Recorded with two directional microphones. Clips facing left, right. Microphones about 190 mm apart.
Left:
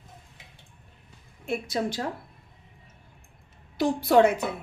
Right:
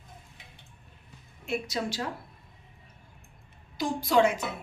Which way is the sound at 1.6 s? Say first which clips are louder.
Left 4 dB; 55° left (ahead or behind).